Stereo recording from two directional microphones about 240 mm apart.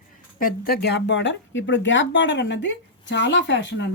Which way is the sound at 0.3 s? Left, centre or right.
Left.